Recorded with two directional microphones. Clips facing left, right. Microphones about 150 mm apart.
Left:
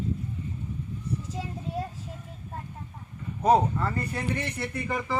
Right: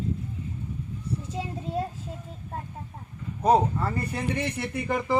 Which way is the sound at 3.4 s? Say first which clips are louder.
Even; centre (ahead or behind).